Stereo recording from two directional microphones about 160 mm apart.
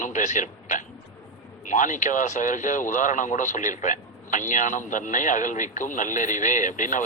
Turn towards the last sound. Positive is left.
turn(degrees=50)  # may be behind; listen again after turning